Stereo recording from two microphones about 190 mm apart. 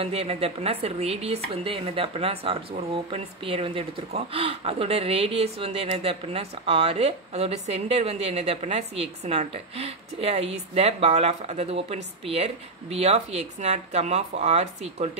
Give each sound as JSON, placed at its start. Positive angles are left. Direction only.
{"t": 0.0, "sound": "a woman's voice", "side_deg": -30}